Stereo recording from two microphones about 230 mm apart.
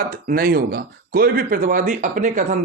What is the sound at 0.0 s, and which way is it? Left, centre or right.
Speech, right.